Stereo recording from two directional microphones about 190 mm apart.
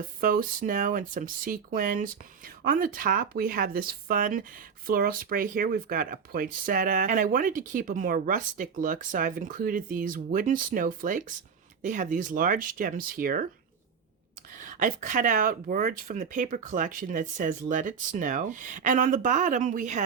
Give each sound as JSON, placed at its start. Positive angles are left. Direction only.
{"t": 0.2, "sound": "speech", "side_deg": -50}
{"t": 14.6, "sound": "speech", "side_deg": -45}